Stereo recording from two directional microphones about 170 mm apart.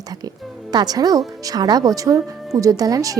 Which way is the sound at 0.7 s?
25° right (ahead or behind).